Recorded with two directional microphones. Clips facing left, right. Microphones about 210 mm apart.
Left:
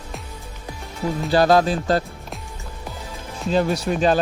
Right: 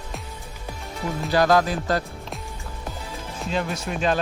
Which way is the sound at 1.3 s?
30° left (ahead or behind).